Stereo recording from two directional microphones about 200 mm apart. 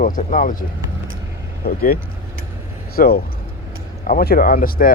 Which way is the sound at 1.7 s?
50° left (ahead or behind).